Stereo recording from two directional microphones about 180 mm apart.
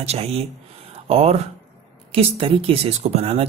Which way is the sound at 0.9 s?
35° right (ahead or behind).